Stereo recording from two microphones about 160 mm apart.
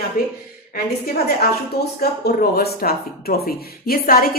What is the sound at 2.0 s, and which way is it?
Speech, 80° left.